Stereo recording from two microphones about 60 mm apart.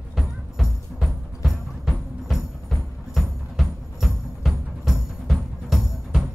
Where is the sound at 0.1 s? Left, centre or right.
Centre.